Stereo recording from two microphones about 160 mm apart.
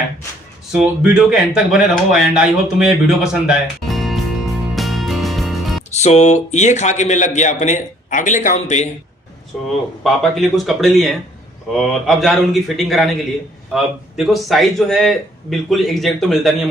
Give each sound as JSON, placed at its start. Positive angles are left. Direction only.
{"t": 0.7, "sound": "speech", "side_deg": -5}
{"t": 5.9, "sound": "speech", "side_deg": 45}
{"t": 10.0, "sound": "a man's voice", "side_deg": 0}